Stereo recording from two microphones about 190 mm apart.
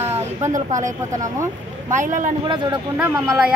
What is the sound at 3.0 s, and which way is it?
Speech, 5° right (ahead or behind).